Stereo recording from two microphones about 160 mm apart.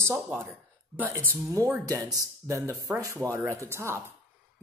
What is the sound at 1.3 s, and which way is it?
A woman's voice, 15° right (ahead or behind).